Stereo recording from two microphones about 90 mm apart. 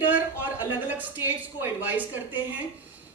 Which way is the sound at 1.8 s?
20° right (ahead or behind).